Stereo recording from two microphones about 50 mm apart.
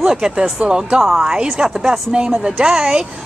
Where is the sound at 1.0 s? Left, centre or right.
Centre.